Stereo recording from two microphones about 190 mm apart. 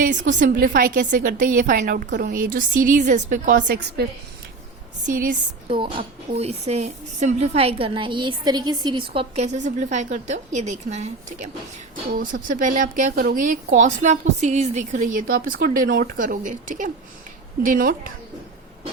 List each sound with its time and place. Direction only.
0.0 s a woman's voice: 40° right (ahead or behind)
1.8 s a woman's voice: 65° right (ahead or behind); by 3.6 s 45° right (ahead or behind)
5.0 s a woman's voice: 45° right (ahead or behind)
5.6 s a woman's voice: 30° right (ahead or behind); by 18.1 s 45° right (ahead or behind)